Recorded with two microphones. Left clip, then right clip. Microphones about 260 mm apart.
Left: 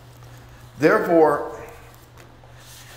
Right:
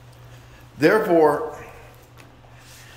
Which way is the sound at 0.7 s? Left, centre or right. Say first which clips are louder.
Even; centre.